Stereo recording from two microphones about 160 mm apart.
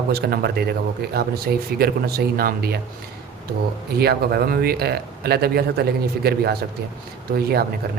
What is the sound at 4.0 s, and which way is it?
Speech, 80° right.